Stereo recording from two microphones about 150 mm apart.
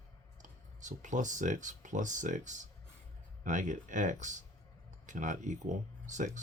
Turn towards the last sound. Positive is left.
turn(degrees=-55)  # may be behind; listen again after turning